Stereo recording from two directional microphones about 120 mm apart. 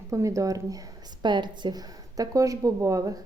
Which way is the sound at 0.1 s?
25° right (ahead or behind).